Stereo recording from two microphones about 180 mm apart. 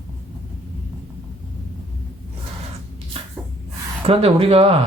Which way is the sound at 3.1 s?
35° right (ahead or behind).